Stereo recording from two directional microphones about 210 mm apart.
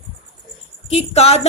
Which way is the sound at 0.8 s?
30° left (ahead or behind).